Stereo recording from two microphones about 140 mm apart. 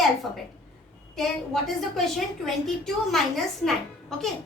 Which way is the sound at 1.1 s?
Centre (ahead or behind).